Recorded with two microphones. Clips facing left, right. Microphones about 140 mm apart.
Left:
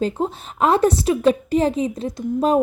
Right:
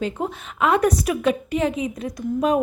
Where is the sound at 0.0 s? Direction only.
35° left (ahead or behind).